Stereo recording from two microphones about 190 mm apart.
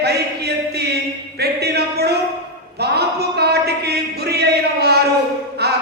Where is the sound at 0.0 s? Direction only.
55° right (ahead or behind).